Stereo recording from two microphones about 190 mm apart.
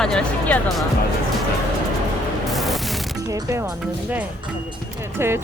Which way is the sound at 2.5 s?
Centre (ahead or behind).